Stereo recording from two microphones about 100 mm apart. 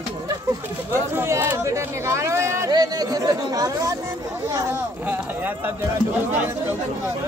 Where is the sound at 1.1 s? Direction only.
25° right (ahead or behind).